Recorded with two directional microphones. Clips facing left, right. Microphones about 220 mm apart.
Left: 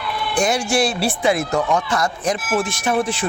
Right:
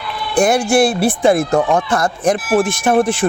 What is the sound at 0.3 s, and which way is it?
Speech, 55° right (ahead or behind).